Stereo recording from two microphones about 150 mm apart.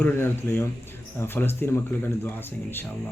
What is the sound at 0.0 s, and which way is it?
A man's voice, 15° left (ahead or behind).